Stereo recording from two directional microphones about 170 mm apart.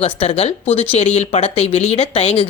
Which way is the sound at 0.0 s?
35° left (ahead or behind).